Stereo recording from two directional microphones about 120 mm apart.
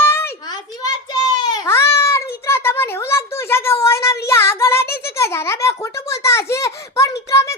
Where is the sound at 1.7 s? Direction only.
20° left (ahead or behind).